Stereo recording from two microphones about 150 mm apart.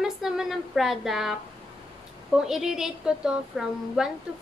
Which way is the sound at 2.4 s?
5° right (ahead or behind).